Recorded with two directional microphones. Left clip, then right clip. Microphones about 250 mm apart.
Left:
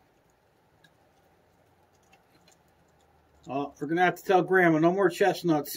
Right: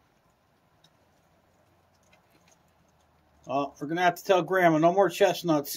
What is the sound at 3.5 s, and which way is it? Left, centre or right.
Speech, right.